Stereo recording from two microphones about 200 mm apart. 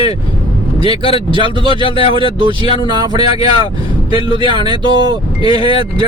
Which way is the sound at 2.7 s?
20° right (ahead or behind).